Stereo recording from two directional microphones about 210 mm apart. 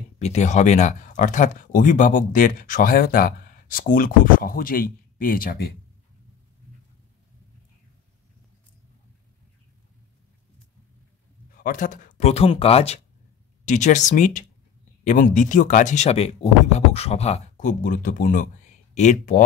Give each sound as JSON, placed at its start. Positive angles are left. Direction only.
{"t": 0.2, "sound": "speech", "side_deg": 30}
{"t": 11.5, "sound": "speech", "side_deg": 40}